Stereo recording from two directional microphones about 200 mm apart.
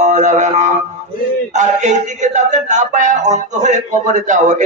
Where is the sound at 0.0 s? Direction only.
40° right (ahead or behind).